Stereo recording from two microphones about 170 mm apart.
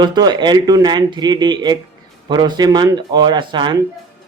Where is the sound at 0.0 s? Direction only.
25° right (ahead or behind).